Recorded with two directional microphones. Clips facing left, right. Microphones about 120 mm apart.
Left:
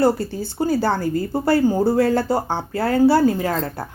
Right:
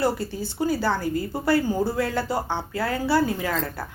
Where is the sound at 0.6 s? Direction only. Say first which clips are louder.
Left 4 dB; 40° left (ahead or behind).